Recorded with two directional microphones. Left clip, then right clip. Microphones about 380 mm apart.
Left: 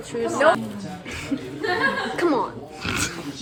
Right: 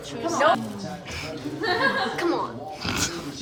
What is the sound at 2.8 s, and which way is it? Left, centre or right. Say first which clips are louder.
Speech: left 2 dB; centre.